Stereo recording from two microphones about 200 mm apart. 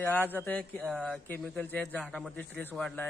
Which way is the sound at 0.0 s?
10° left (ahead or behind).